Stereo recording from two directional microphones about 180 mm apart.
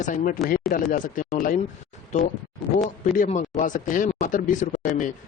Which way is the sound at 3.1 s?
45° left (ahead or behind).